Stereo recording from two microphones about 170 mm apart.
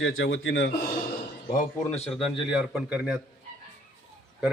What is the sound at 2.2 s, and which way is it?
A man's voice, centre (ahead or behind).